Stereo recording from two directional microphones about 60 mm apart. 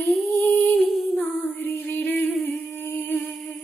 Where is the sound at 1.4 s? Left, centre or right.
Left.